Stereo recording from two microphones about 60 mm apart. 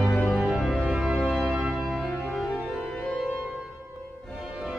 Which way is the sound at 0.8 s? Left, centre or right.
Centre.